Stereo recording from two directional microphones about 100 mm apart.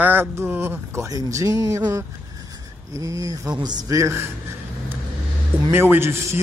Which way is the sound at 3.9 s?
30° right (ahead or behind).